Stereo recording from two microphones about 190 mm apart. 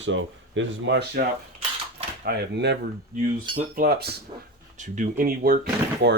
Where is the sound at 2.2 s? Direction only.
60° right (ahead or behind).